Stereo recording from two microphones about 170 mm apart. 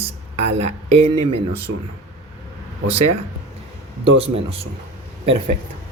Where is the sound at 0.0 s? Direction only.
40° right (ahead or behind).